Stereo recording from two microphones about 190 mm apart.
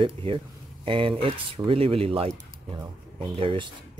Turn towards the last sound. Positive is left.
turn(degrees=-30)  # may be behind; listen again after turning